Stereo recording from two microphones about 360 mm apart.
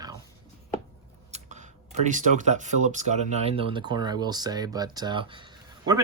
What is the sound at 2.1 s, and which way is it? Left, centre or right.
Speech, centre.